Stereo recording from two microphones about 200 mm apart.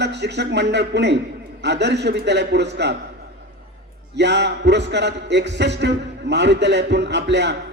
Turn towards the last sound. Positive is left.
turn(degrees=-60)  # may be behind; listen again after turning